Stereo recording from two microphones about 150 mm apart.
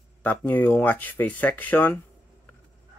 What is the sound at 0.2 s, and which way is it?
Speech, 10° left (ahead or behind).